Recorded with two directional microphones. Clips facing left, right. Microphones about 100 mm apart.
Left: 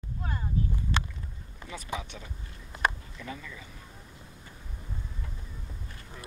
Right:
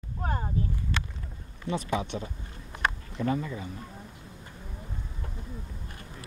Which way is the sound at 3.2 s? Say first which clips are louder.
Right 14 dB; 40° right (ahead or behind).